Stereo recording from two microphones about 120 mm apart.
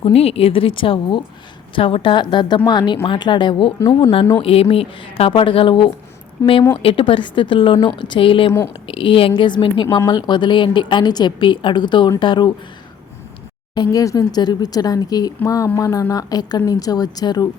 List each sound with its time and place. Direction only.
0.0 s a woman's voice: 55° left (ahead or behind); by 12.5 s 40° left (ahead or behind)
13.7 s a woman's voice: 30° left (ahead or behind)